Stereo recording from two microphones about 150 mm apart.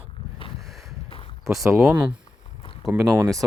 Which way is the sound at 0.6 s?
Centre (ahead or behind).